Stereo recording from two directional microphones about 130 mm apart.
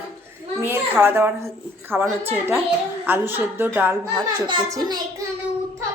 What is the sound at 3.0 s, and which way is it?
Speech, 15° right (ahead or behind).